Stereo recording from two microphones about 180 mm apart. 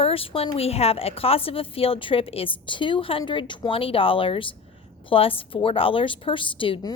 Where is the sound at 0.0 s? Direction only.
30° left (ahead or behind).